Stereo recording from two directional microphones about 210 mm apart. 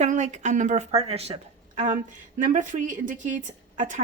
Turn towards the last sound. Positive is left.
turn(degrees=-35)  # may be behind; listen again after turning